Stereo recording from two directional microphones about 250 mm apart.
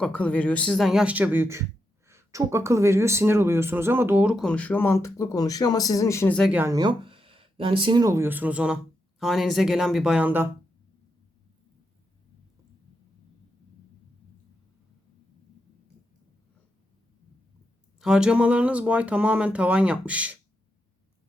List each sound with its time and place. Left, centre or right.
0.0 s speech: centre
6.5 s speech: centre
18.0 s speech: centre